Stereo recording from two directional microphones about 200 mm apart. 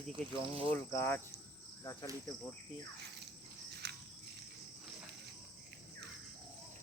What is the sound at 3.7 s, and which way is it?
Cricket, 55° right (ahead or behind).